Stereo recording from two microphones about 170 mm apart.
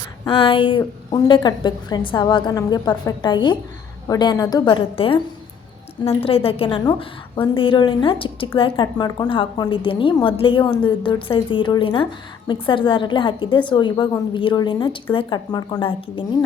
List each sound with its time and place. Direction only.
0.3 s a woman's voice: 30° left (ahead or behind)
6.2 s a woman's voice: 35° left (ahead or behind)